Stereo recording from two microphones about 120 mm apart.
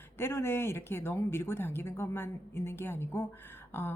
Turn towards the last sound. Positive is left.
turn(degrees=20)  # may be behind; listen again after turning